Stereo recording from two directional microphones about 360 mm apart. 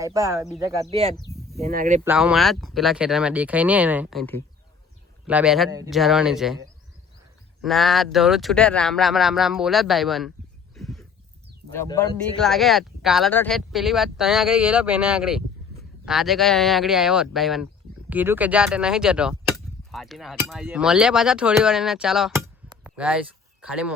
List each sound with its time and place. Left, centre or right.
0.0 s speech: centre
1.1 s speech: centre
1.5 s speech: right
2.0 s speech: centre
10.8 s a sound: centre
11.7 s speech: centre
22.7 s a sound: centre